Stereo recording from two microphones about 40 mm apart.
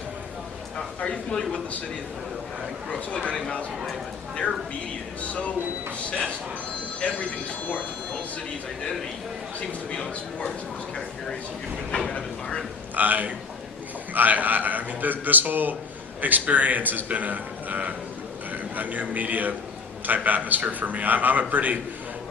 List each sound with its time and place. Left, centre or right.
0.9 s speech: left
5.3 s speech: left
7.0 s speech: left
9.9 s speech: centre
11.9 s speech: centre
13.0 s a man's voice: right